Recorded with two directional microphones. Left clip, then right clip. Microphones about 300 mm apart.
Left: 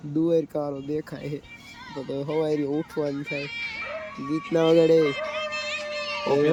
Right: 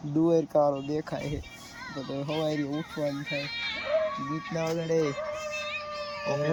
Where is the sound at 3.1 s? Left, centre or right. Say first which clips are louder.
Left 3 dB; centre.